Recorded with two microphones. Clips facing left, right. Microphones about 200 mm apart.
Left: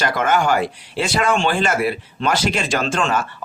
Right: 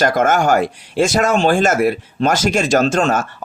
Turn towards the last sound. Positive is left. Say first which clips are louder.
# right 6 dB
turn(degrees=-45)  # may be behind; listen again after turning